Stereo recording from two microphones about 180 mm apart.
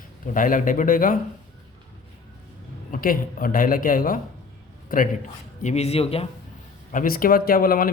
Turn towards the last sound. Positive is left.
turn(degrees=55)  # may be behind; listen again after turning